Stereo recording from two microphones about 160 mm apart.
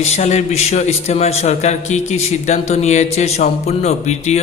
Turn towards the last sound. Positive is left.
turn(degrees=45)  # may be behind; listen again after turning